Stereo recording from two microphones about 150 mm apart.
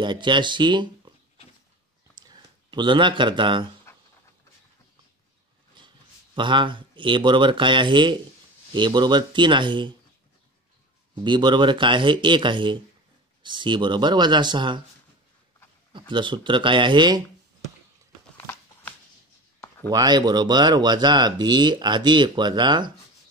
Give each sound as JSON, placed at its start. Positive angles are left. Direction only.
{"t": 0.0, "sound": "speech", "side_deg": -30}
{"t": 2.2, "sound": "speech", "side_deg": -30}
{"t": 5.8, "sound": "a sound", "side_deg": -35}
{"t": 6.3, "sound": "speech", "side_deg": -30}
{"t": 11.1, "sound": "speech", "side_deg": -30}
{"t": 15.9, "sound": "speech", "side_deg": -30}
{"t": 19.9, "sound": "speech", "side_deg": -25}